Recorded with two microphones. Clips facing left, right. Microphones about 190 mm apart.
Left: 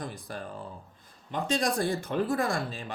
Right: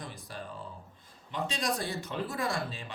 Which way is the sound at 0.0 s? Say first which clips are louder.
Left 6 dB; 50° left (ahead or behind).